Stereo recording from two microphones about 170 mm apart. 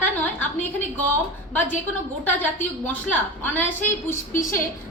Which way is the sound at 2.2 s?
10° left (ahead or behind).